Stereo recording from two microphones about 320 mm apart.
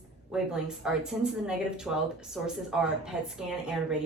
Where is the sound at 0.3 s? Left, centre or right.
Centre.